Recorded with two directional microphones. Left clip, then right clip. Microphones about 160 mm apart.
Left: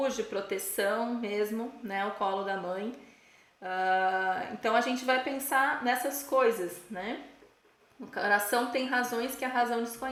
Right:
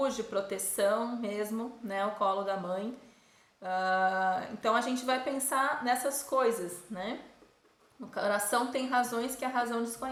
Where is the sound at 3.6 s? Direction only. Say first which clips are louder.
Left 1 dB; 20° left (ahead or behind).